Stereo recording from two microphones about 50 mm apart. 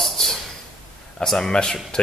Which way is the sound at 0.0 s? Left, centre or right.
Centre.